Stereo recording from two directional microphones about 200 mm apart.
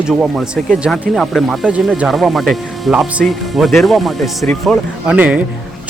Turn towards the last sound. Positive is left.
turn(degrees=-5)  # may be behind; listen again after turning